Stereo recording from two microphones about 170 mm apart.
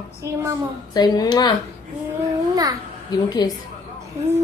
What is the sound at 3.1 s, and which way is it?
Speech, 20° left (ahead or behind).